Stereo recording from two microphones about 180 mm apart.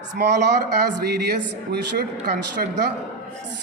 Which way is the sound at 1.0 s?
65° right (ahead or behind).